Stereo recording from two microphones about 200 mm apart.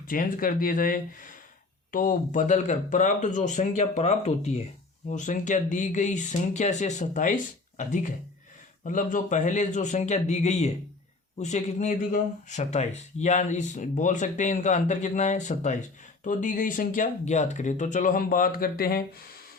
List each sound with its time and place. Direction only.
0.1 s speech: 45° left (ahead or behind)